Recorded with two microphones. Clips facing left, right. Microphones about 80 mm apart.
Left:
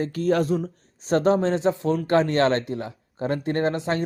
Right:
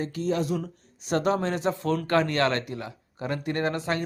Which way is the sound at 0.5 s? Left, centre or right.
Left.